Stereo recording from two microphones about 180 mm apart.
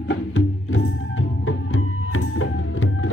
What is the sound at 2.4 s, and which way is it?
Music, 90° left.